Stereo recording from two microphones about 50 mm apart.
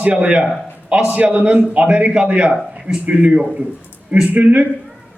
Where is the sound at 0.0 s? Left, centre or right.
Right.